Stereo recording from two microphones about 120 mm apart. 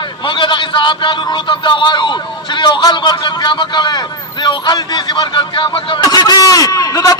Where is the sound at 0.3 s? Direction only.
40° left (ahead or behind).